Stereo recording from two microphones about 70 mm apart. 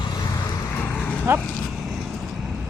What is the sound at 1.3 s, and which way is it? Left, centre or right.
Speech, right.